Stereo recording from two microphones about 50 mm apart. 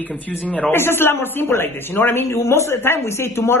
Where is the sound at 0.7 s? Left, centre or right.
Left.